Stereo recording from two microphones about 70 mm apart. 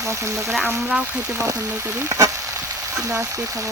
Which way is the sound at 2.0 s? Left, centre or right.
Right.